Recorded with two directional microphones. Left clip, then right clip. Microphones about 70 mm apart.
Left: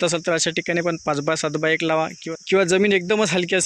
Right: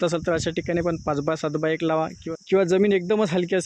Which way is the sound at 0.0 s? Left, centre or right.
Right.